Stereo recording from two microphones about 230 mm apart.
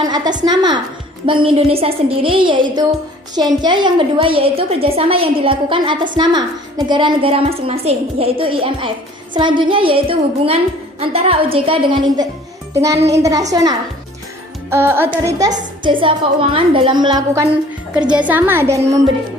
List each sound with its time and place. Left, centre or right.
0.0 s a woman's voice: centre
17.9 s a woman's voice: centre